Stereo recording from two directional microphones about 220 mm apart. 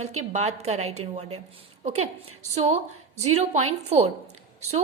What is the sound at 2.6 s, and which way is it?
A woman's voice, 30° right (ahead or behind).